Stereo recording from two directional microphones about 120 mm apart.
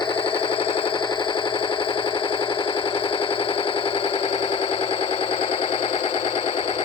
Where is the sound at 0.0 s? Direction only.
45° left (ahead or behind).